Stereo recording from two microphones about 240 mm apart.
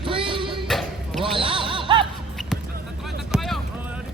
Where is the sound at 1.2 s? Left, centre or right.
Right.